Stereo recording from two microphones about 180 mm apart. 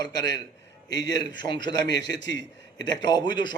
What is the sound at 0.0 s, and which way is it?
A man's voice, 20° left (ahead or behind).